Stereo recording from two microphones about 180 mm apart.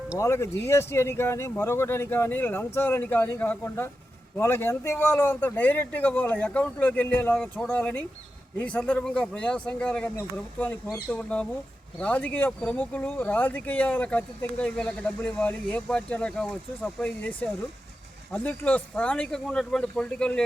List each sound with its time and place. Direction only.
0.2 s speech: 15° left (ahead or behind)